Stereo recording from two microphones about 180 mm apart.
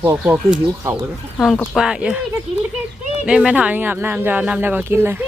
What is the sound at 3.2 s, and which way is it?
Speech, 5° right (ahead or behind).